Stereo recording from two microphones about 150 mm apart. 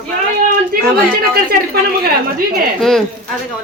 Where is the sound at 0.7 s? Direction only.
75° right (ahead or behind).